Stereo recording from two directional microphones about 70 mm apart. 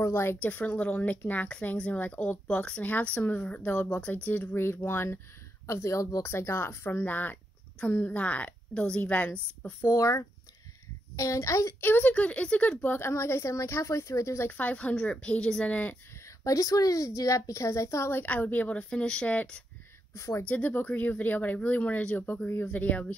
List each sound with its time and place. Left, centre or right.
0.0 s speech: left
0.4 s a woman's voice: left
9.9 s a woman's voice: left
11.8 s speech: left
13.1 s a woman's voice: left
14.5 s speech: left
16.4 s a woman's voice: left
18.2 s speech: left
20.2 s a woman's voice: left
20.4 s speech: left